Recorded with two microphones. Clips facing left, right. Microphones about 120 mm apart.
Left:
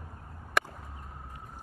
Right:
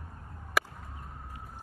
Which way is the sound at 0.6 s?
Centre (ahead or behind).